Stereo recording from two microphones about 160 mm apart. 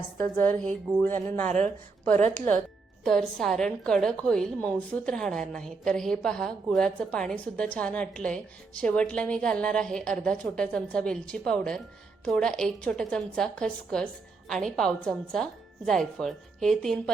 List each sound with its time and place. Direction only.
0.2 s a woman's voice: 10° left (ahead or behind)
3.0 s a woman's voice: 5° left (ahead or behind)